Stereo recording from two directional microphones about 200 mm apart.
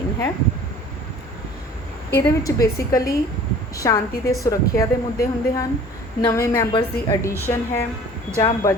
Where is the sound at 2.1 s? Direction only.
15° left (ahead or behind).